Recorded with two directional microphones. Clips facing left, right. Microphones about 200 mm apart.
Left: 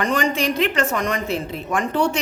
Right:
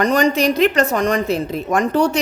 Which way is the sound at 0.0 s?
40° right (ahead or behind).